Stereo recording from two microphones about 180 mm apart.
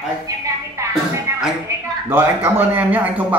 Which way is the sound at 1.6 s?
10° right (ahead or behind).